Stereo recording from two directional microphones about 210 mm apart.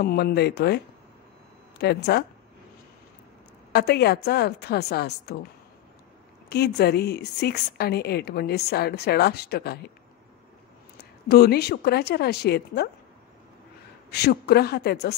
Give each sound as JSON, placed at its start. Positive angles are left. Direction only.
{"t": 0.0, "sound": "a woman's voice", "side_deg": 50}
{"t": 1.8, "sound": "a woman's voice", "side_deg": 50}
{"t": 3.7, "sound": "a woman's voice", "side_deg": 50}
{"t": 6.5, "sound": "a woman's voice", "side_deg": 50}
{"t": 11.2, "sound": "a woman's voice", "side_deg": 50}
{"t": 14.1, "sound": "a woman's voice", "side_deg": 50}